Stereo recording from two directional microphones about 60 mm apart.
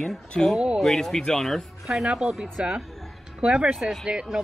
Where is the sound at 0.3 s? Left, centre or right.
Centre.